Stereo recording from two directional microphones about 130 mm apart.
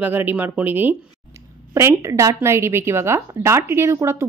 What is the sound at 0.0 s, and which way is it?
A woman's voice, 15° right (ahead or behind).